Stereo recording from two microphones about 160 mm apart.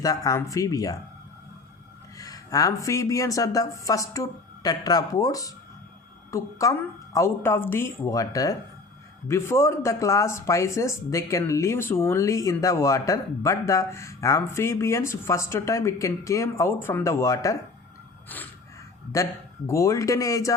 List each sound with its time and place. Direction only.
0.0 s speech: 20° left (ahead or behind)
2.1 s speech: 20° left (ahead or behind)